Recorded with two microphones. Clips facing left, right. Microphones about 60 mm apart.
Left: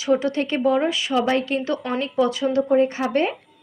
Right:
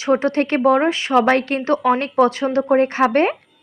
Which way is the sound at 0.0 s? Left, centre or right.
Right.